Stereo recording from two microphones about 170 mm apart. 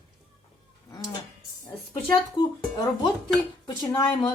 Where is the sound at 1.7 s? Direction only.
30° left (ahead or behind).